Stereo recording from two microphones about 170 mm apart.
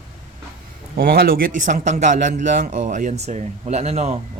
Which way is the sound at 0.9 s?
60° right (ahead or behind).